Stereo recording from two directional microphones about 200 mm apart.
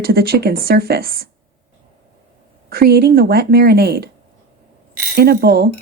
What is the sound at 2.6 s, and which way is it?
Speech, 50° right (ahead or behind).